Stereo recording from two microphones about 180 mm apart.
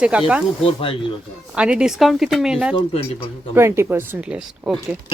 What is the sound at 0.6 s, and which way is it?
Speech, 30° left (ahead or behind).